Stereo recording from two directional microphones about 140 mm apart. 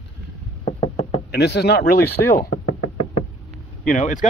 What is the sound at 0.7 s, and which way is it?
Knock, 40° left (ahead or behind).